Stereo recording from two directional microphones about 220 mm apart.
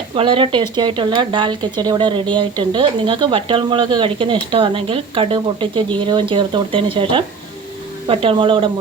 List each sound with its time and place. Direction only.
0.2 s speech: 25° right (ahead or behind)